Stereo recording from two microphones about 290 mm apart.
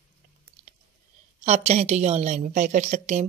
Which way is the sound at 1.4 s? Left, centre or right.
Right.